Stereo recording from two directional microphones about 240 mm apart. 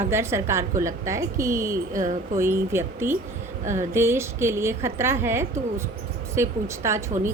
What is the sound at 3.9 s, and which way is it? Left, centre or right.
A woman's voice, centre.